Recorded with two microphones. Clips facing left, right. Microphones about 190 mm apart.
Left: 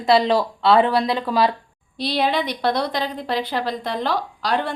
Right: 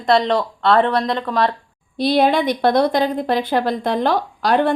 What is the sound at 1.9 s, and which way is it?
Speech, 50° right (ahead or behind).